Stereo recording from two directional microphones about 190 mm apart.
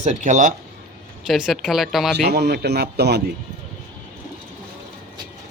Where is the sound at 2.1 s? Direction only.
60° right (ahead or behind).